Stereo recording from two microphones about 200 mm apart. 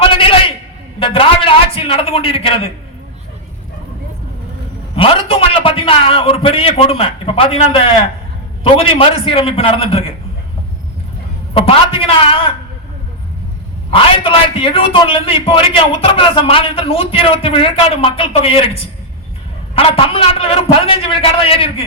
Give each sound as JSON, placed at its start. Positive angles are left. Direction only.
{"t": 0.0, "sound": "a sound", "side_deg": 25}
{"t": 0.9, "sound": "a man's voice", "side_deg": 25}
{"t": 4.9, "sound": "a man's voice", "side_deg": 25}
{"t": 11.5, "sound": "a man's voice", "side_deg": 25}
{"t": 13.9, "sound": "a man's voice", "side_deg": 25}